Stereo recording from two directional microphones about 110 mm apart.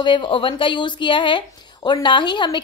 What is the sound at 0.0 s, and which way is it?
A woman's voice, 45° left (ahead or behind).